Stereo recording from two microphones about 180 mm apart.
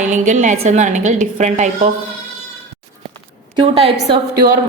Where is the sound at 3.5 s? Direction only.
30° right (ahead or behind).